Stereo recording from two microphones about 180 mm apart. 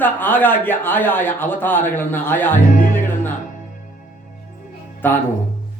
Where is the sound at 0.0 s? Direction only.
10° left (ahead or behind).